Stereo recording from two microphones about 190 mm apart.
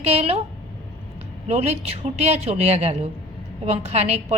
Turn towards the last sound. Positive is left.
turn(degrees=-35)  # may be behind; listen again after turning